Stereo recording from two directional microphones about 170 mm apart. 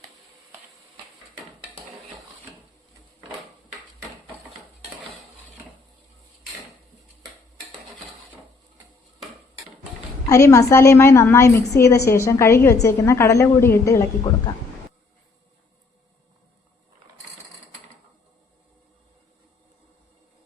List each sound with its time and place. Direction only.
10.2 s a woman's voice: 20° left (ahead or behind)